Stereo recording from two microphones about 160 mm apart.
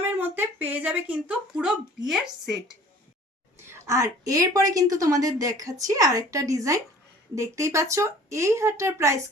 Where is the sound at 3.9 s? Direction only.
20° right (ahead or behind).